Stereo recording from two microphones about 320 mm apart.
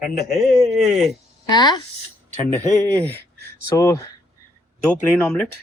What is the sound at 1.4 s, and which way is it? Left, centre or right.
Speech, centre.